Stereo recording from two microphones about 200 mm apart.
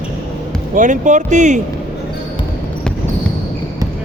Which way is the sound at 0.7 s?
40° right (ahead or behind).